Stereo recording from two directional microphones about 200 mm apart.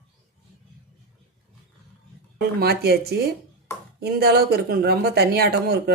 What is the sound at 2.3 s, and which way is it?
Speech, 50° right (ahead or behind).